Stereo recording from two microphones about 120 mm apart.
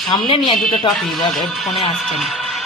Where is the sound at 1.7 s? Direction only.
55° left (ahead or behind).